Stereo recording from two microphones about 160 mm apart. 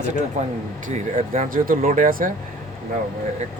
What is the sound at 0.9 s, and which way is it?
Speech, 50° right (ahead or behind).